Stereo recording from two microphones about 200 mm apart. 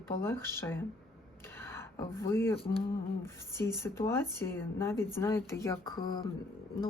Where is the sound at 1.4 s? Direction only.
10° left (ahead or behind).